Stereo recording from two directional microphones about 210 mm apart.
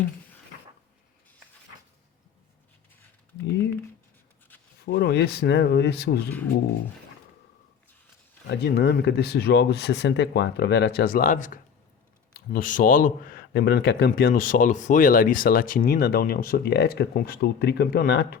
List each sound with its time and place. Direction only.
4.9 s a man's voice: 50° left (ahead or behind)
8.4 s a man's voice: 50° left (ahead or behind)